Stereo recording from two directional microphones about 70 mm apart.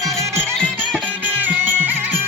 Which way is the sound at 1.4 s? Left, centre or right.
Right.